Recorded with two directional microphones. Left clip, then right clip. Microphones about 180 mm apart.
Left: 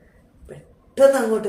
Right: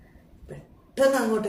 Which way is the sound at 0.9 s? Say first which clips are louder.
Left 6 dB; centre (ahead or behind).